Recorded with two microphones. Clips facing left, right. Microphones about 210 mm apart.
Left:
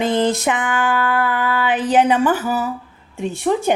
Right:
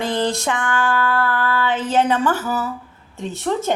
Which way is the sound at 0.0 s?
20° left (ahead or behind).